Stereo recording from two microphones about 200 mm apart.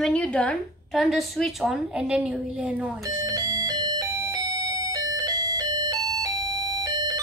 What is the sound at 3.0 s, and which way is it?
Music, 20° right (ahead or behind).